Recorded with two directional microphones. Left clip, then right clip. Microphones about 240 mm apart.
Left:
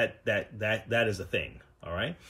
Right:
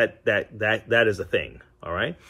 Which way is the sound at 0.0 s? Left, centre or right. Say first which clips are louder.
Right 7 dB; centre.